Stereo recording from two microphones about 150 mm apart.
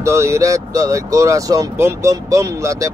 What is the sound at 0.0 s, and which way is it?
Speech, 20° right (ahead or behind).